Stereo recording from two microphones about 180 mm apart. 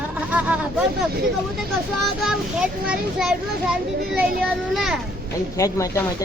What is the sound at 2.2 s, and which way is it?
Speech, centre (ahead or behind).